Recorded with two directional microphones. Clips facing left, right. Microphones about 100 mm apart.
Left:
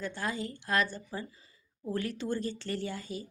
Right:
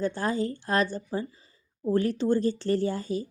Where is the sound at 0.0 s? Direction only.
35° right (ahead or behind).